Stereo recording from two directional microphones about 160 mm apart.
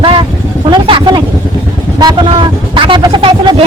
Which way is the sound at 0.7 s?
30° right (ahead or behind).